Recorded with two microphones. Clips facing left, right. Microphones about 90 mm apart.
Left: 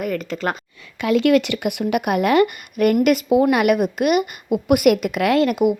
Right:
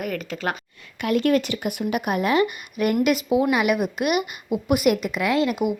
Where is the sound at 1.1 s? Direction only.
90° left.